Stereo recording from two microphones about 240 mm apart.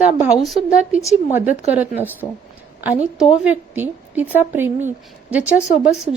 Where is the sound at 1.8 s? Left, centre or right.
Centre.